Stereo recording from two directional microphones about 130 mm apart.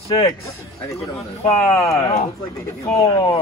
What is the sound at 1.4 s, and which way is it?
Speech, 55° left (ahead or behind).